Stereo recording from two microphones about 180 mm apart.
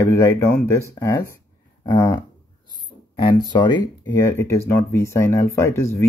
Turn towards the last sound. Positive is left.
turn(degrees=15)  # may be behind; listen again after turning